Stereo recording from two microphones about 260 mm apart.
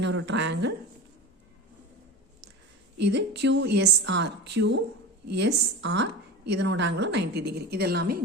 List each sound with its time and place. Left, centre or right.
0.0 s speech: right
3.0 s a woman's voice: right